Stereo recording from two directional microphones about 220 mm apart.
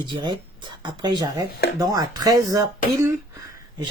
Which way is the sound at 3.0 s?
15° right (ahead or behind).